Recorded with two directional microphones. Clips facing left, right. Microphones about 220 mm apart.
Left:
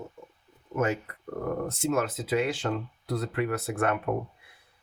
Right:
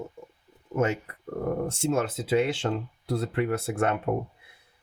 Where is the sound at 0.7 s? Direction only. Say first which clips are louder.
Right 2 dB; 25° right (ahead or behind).